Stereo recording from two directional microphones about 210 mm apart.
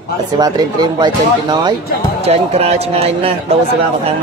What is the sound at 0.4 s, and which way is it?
Speech, 20° right (ahead or behind).